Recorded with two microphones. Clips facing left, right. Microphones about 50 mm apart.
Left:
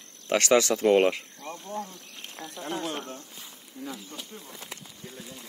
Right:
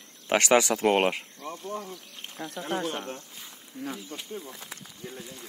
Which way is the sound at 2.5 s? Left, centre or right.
Right.